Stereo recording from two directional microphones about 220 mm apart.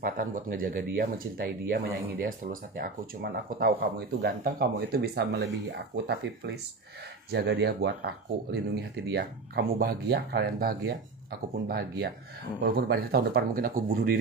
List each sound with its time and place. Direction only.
0.0 s speech: 40° right (ahead or behind)